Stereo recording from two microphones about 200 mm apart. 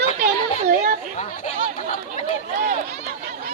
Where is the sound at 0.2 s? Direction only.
40° right (ahead or behind).